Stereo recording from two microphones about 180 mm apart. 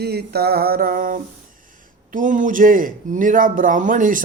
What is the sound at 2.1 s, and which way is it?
Speech, 45° right (ahead or behind).